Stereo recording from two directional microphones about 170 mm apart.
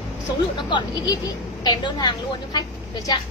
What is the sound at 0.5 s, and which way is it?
A woman's voice, 25° left (ahead or behind).